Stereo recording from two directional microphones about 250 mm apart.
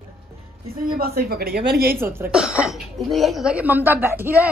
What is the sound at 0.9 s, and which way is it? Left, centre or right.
Speech, right.